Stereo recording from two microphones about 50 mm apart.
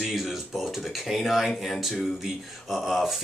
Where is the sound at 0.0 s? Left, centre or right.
Centre.